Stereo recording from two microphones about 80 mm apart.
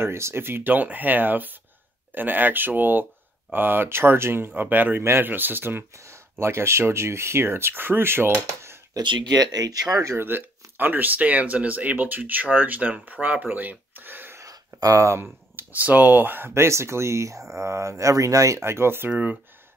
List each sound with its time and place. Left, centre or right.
0.0 s speech: right
8.4 s typewriter: right
9.0 s speech: right
9.3 s speech: right
9.9 s speech: right
14.4 s a sound: right
15.5 s speech: right